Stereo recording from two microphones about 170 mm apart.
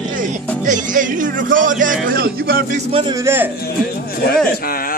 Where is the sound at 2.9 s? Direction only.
30° right (ahead or behind).